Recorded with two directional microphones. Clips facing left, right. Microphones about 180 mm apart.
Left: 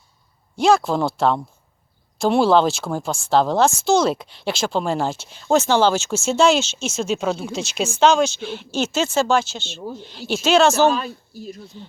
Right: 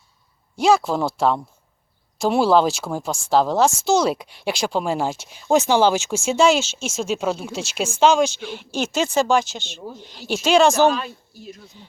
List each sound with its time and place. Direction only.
0.5 s speech: 5° right (ahead or behind)
10.9 s speech: 35° left (ahead or behind)